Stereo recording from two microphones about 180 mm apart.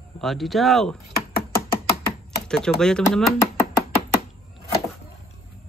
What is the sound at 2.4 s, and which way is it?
Typing, 5° left (ahead or behind).